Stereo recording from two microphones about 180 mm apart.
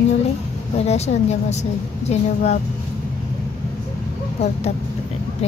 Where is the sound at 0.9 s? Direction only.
35° left (ahead or behind).